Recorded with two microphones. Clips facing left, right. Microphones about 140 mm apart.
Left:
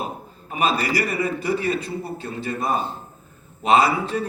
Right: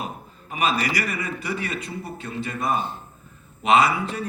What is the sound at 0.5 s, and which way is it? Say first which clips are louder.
A man's voice: left 2 dB; 30° left (ahead or behind).